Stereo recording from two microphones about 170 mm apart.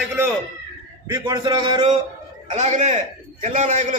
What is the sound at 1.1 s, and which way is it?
Speech, 25° right (ahead or behind).